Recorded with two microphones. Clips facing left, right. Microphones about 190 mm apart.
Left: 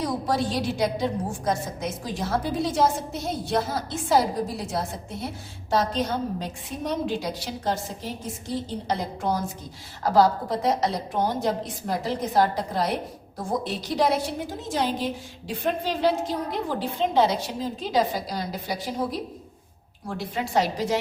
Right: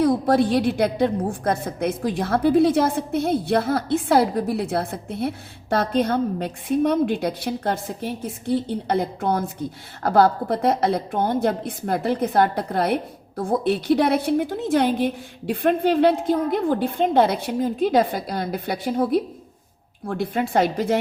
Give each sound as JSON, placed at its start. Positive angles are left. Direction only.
{"t": 0.0, "sound": "a woman's voice", "side_deg": -55}